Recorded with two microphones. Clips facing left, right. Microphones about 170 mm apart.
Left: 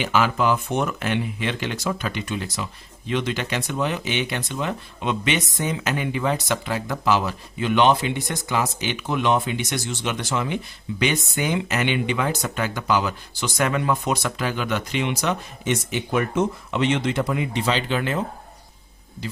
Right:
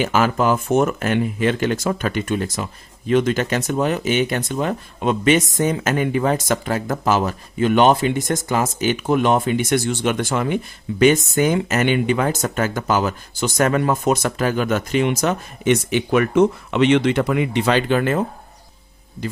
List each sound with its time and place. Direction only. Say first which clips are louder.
0.0 s speech: right 3 dB; 45° right (ahead or behind)
15.6 s speech: right 8 dB; 70° right (ahead or behind); by 18.3 s 50° right (ahead or behind)